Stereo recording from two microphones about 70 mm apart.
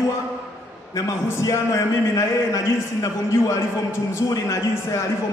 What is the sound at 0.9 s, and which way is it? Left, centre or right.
A man's voice, left.